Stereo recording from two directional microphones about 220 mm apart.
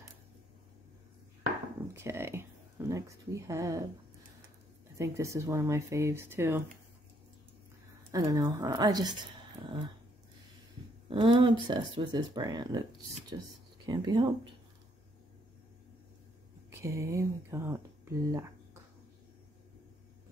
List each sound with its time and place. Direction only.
2.0 s speech: 10° right (ahead or behind)
4.9 s speech: 15° right (ahead or behind)
8.1 s speech: 15° right (ahead or behind)
11.1 s speech: 20° right (ahead or behind)
16.7 s speech: 15° right (ahead or behind)